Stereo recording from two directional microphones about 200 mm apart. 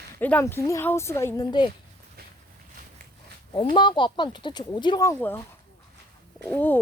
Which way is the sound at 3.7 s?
25° left (ahead or behind).